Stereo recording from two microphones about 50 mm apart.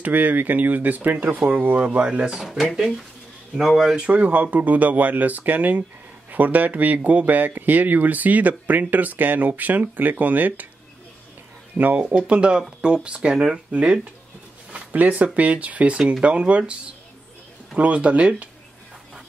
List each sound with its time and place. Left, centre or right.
0.0 s speech: right
1.9 s speech: right
2.3 s speech: centre
3.9 s speech: right
11.7 s speech: right
12.1 s speech: right
15.0 s speech: right
17.7 s speech: right